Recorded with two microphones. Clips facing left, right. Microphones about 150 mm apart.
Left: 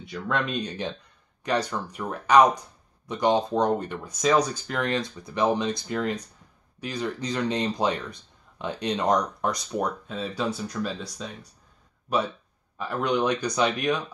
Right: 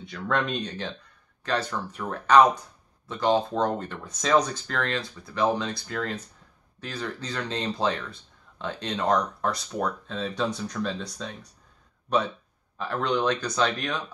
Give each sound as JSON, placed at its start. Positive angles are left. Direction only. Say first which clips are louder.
{"t": 0.0, "sound": "speech", "louder": "right 1 dB", "side_deg": 10}